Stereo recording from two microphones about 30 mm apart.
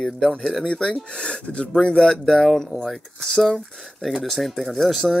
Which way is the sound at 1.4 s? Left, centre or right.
Left.